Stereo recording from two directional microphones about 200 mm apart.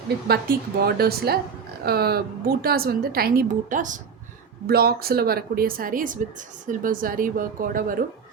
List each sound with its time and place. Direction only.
0.3 s a woman's voice: 50° right (ahead or behind)
4.6 s a woman's voice: 50° right (ahead or behind)